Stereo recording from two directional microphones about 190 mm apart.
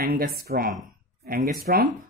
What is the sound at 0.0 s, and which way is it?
Speech, 50° right (ahead or behind).